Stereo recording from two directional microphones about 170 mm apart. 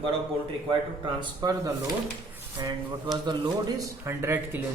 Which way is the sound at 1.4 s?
20° right (ahead or behind).